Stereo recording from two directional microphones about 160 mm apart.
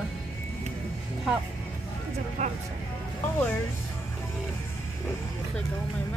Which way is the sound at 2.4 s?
50° right (ahead or behind).